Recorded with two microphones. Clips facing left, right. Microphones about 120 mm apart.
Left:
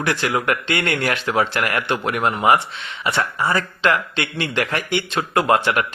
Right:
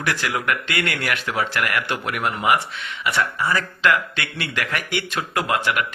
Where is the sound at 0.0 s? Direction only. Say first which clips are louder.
Left 3 dB; 25° left (ahead or behind).